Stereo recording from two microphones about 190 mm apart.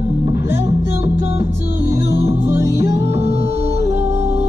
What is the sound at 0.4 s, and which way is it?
Music, 15° right (ahead or behind).